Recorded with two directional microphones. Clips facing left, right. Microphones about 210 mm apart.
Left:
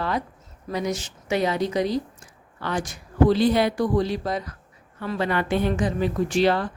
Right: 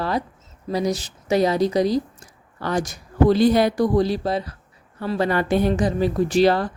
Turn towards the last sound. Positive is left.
turn(degrees=-40)  # may be behind; listen again after turning